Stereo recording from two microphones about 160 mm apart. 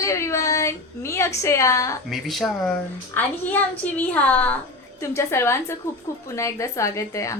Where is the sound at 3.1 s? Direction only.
10° left (ahead or behind).